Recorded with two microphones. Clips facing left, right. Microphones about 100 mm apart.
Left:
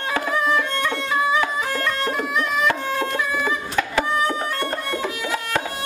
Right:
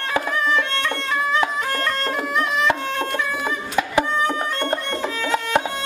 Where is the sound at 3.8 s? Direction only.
15° right (ahead or behind).